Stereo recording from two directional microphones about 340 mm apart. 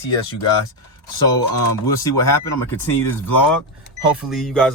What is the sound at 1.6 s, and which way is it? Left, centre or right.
Speech, left.